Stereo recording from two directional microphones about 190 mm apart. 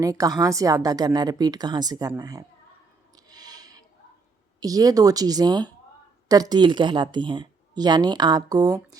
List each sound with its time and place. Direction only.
0.0 s a woman's voice: 20° right (ahead or behind)
3.2 s a sound: 20° right (ahead or behind)
4.6 s a woman's voice: 20° right (ahead or behind)